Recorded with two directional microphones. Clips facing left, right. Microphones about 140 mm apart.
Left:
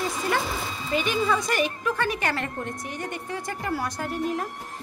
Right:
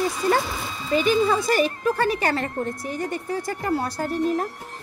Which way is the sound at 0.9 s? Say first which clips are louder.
Right 5 dB; 35° right (ahead or behind).